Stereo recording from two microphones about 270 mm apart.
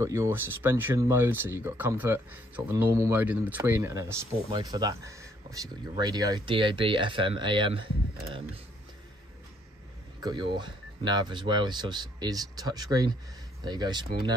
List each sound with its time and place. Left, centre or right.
0.0 s speech: centre
10.2 s speech: centre